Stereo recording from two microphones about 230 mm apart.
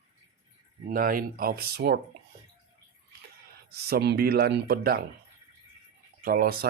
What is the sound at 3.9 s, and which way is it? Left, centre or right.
Speech, right.